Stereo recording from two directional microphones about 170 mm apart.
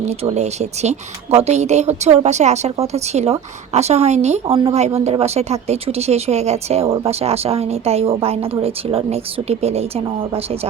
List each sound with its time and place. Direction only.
0.1 s speech: 40° right (ahead or behind)